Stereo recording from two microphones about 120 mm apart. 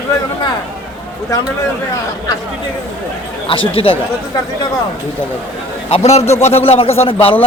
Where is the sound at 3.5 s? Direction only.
45° left (ahead or behind).